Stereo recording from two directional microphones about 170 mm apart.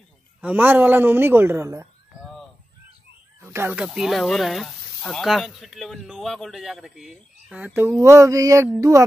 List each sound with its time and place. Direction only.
0.4 s a woman's voice: 10° right (ahead or behind)
3.3 s speech: 15° right (ahead or behind)
7.7 s a woman's voice: 15° right (ahead or behind)